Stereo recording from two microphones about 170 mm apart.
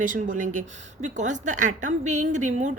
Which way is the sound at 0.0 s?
50° right (ahead or behind).